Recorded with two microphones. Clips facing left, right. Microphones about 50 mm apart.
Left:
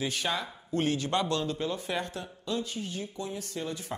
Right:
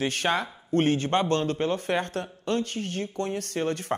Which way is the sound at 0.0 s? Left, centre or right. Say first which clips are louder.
Right 6 dB; right.